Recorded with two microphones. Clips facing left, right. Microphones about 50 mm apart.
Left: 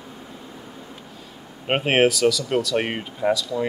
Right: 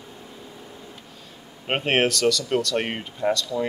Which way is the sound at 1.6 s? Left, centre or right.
Centre.